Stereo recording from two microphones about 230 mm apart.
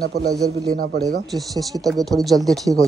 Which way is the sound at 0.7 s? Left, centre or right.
Right.